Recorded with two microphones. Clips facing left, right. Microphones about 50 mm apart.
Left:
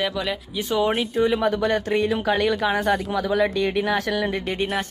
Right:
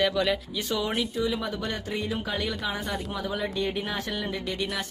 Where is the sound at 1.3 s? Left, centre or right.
Left.